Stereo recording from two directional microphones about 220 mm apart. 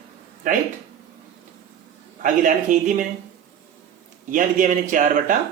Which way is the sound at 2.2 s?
35° right (ahead or behind).